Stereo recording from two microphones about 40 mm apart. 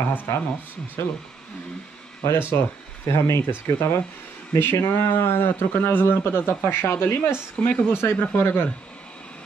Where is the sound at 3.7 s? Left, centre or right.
Left.